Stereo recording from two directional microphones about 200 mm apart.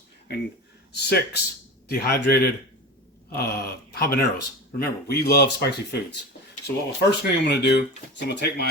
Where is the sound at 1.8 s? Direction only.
50° left (ahead or behind).